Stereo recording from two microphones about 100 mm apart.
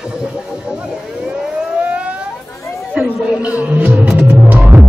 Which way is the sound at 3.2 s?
15° right (ahead or behind).